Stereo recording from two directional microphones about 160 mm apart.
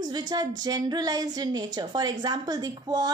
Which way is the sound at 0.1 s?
25° right (ahead or behind).